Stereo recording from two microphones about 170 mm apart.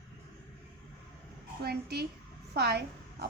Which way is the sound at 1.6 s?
70° right (ahead or behind).